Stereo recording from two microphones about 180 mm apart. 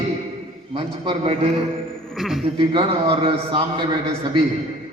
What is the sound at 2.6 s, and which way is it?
A man's voice, 30° right (ahead or behind).